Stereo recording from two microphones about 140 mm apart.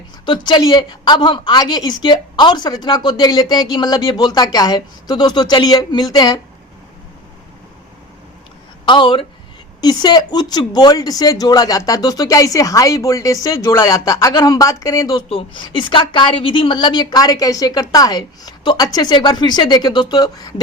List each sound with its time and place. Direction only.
0.3 s a woman's voice: 35° left (ahead or behind)
8.9 s a woman's voice: 35° left (ahead or behind)
15.3 s a woman's voice: 40° left (ahead or behind)